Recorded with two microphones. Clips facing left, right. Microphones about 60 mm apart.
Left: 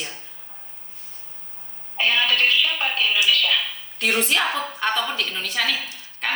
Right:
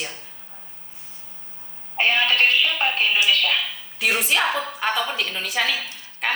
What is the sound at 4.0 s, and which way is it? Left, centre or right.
A woman's voice, centre.